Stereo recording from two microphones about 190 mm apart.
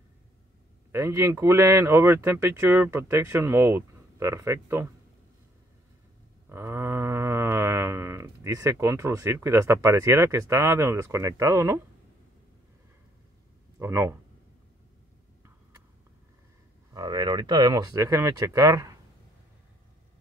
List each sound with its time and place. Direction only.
0.9 s speech: 15° right (ahead or behind)
6.5 s livestock: 15° right (ahead or behind)
13.7 s speech: 15° right (ahead or behind)
16.9 s speech: 20° right (ahead or behind)